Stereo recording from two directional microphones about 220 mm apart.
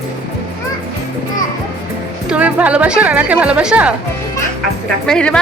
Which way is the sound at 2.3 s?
5° right (ahead or behind).